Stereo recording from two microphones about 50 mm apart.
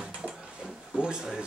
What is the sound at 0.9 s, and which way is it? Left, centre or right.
Speech, centre.